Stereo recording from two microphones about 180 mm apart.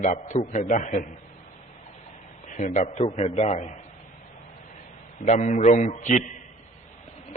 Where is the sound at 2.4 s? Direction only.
45° left (ahead or behind).